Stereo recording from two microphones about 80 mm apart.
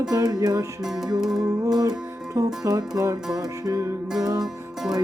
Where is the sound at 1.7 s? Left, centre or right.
Right.